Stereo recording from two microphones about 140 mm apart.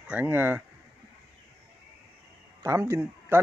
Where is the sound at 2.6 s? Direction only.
20° right (ahead or behind).